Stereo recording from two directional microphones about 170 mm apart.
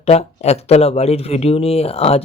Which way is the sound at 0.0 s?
40° left (ahead or behind).